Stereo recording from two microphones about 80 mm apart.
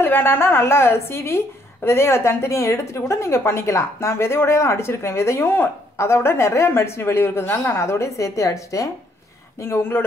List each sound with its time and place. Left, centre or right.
0.0 s a woman's voice: left
9.6 s speech: left